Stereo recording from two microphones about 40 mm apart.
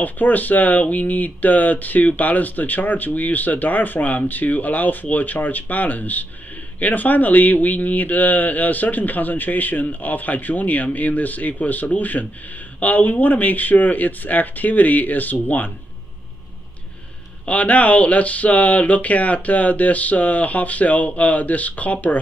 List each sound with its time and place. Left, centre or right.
0.0 s a man's voice: left
17.5 s speech: left